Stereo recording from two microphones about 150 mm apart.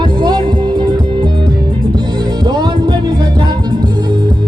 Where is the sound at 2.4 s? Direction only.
25° right (ahead or behind).